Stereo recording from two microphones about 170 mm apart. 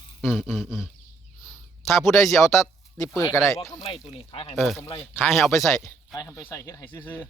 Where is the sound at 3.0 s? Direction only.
20° left (ahead or behind).